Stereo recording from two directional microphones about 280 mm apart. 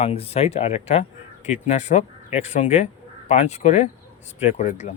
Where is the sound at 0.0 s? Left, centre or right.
Left.